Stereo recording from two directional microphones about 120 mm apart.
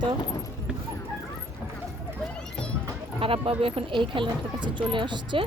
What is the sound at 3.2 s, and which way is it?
Speech, 50° right (ahead or behind).